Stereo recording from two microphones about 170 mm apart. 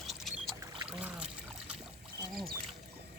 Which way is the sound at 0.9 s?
10° right (ahead or behind).